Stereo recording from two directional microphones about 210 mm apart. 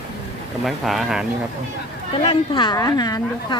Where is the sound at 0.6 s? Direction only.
Centre (ahead or behind).